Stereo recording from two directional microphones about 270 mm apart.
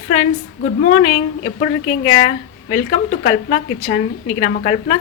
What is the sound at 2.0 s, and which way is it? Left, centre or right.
A woman's voice, left.